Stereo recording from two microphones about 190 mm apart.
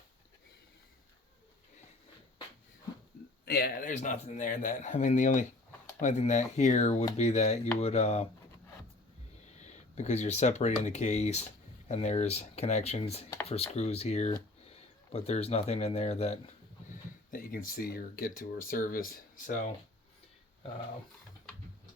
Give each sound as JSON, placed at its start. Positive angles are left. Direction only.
{"t": 3.4, "sound": "speech", "side_deg": 55}
{"t": 9.9, "sound": "speech", "side_deg": 35}
{"t": 16.9, "sound": "speech", "side_deg": 45}